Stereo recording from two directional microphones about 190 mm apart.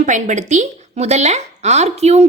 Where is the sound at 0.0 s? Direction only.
40° right (ahead or behind).